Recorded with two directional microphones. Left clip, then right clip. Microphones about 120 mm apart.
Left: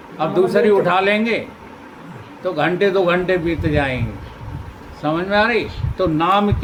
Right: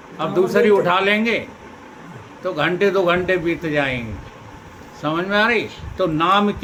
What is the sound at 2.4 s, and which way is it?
Speech, 30° right (ahead or behind).